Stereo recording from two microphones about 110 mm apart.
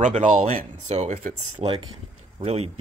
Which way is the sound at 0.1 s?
90° right.